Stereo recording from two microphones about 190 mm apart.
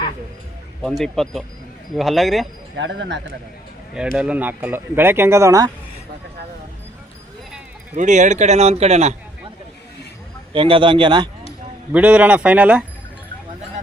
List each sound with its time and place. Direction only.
0.8 s speech: 5° left (ahead or behind)
2.7 s speech: 75° right (ahead or behind)
4.2 s speech: 10° right (ahead or behind)
7.9 s speech: 40° right (ahead or behind)
10.5 s a man's voice: 25° right (ahead or behind)
11.9 s speech: 5° right (ahead or behind)